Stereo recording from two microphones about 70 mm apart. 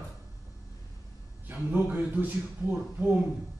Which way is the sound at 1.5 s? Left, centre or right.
Right.